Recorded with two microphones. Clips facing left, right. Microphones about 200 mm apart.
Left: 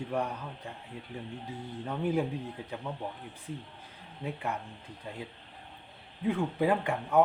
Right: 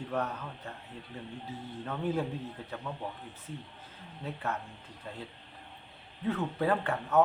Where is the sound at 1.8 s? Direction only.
15° left (ahead or behind).